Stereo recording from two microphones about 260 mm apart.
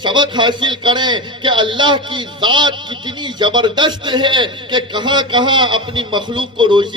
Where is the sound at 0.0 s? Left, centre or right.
Centre.